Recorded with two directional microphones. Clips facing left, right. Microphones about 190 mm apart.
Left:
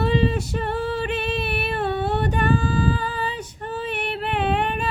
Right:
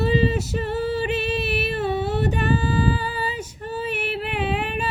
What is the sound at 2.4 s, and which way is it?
Female singing, 50° left (ahead or behind).